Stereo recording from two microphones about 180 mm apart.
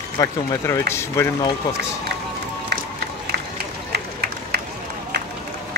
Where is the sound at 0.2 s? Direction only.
20° left (ahead or behind).